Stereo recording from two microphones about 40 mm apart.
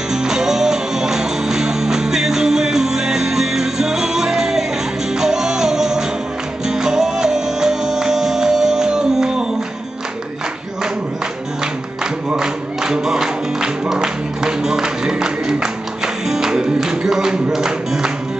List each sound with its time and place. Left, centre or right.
0.1 s music: centre
12.4 s music: centre